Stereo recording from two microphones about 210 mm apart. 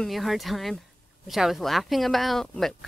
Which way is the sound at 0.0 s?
Centre (ahead or behind).